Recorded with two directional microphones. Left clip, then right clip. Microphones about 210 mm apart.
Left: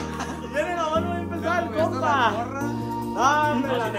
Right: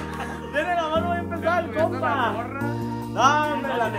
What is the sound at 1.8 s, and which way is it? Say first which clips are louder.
Music: left 1 dB; 15° left (ahead or behind).